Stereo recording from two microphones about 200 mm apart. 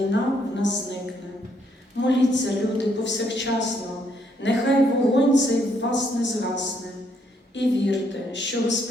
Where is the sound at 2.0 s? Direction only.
65° left (ahead or behind).